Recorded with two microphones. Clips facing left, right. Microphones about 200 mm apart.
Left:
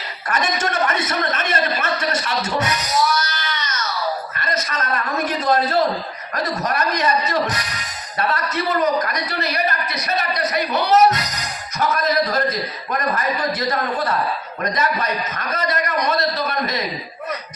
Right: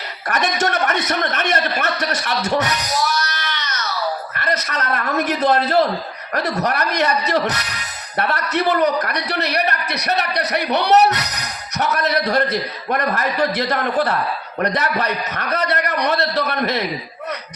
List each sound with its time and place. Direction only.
0.3 s a man's voice: 70° right (ahead or behind)
3.3 s baby cry: 70° right (ahead or behind)
4.4 s a man's voice: 70° right (ahead or behind)